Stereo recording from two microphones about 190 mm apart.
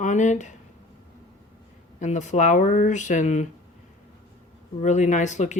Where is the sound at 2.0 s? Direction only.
40° left (ahead or behind).